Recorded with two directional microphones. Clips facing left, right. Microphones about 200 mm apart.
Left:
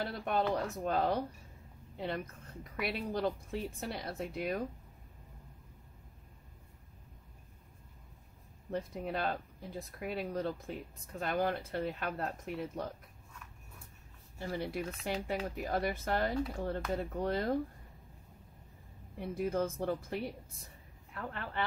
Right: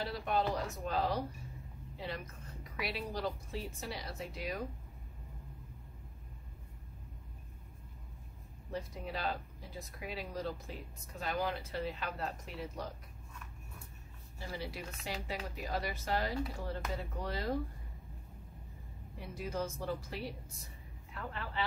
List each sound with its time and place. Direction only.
0.0 s speech: 55° left (ahead or behind)
8.7 s speech: 55° left (ahead or behind)
14.4 s speech: 55° left (ahead or behind)
19.1 s speech: 55° left (ahead or behind)